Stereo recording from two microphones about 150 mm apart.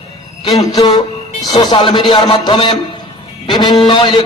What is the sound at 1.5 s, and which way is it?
A man's voice, 25° left (ahead or behind).